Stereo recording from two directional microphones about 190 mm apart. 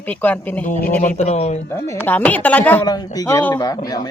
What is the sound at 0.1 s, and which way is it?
Speech, 10° left (ahead or behind).